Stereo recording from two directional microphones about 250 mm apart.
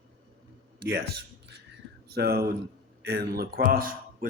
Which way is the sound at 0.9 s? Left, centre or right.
Right.